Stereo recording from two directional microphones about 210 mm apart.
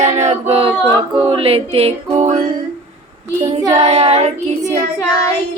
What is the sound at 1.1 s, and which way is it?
Music, 25° right (ahead or behind).